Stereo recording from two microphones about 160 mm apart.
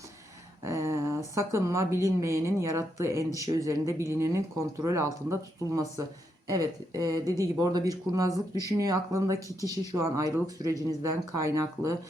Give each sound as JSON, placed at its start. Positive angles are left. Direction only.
{"t": 0.6, "sound": "speech", "side_deg": -15}